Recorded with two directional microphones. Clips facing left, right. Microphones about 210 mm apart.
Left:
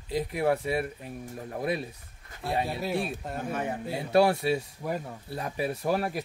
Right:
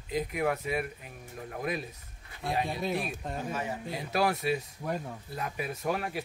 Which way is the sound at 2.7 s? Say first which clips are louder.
Left 2 dB; 5° left (ahead or behind).